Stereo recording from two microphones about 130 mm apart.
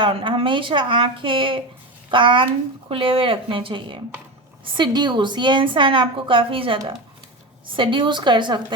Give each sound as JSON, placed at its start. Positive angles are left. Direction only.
{"t": 0.0, "sound": "a woman's voice", "side_deg": -40}
{"t": 7.8, "sound": "a woman's voice", "side_deg": -40}